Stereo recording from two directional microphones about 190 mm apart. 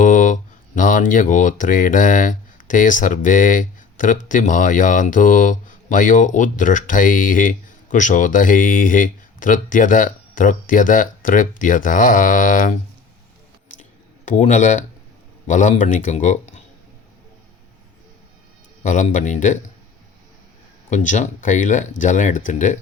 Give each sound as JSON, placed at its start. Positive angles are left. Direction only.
{"t": 0.0, "sound": "a sound", "side_deg": 40}
{"t": 0.8, "sound": "speech", "side_deg": 45}
{"t": 14.3, "sound": "speech", "side_deg": 40}
{"t": 18.8, "sound": "speech", "side_deg": 40}
{"t": 20.9, "sound": "speech", "side_deg": 40}